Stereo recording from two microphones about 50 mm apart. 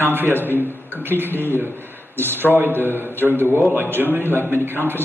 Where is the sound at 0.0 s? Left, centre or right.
Right.